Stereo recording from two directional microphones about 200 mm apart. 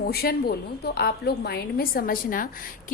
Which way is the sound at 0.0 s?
50° left (ahead or behind).